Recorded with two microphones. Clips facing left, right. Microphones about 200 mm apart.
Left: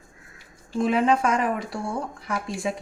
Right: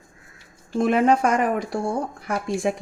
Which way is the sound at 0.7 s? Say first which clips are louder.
Right 3 dB; 45° right (ahead or behind).